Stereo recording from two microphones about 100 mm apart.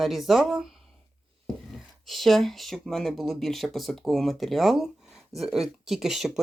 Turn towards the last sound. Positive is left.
turn(degrees=-5)  # may be behind; listen again after turning